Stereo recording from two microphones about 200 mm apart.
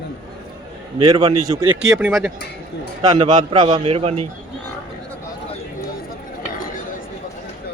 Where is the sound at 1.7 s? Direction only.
5° right (ahead or behind).